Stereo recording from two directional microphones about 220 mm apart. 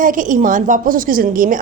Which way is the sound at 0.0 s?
35° right (ahead or behind).